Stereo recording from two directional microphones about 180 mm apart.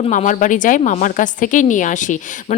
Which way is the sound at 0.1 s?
45° left (ahead or behind).